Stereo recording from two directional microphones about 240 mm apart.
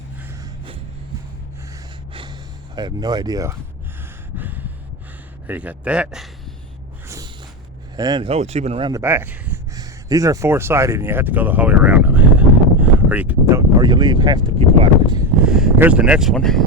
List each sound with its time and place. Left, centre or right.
0.3 s a sound: centre
2.7 s speech: centre
4.4 s gasp: centre
5.5 s speech: centre
7.9 s speech: centre
15.4 s speech: centre